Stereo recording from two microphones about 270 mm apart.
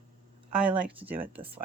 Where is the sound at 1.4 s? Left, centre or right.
Centre.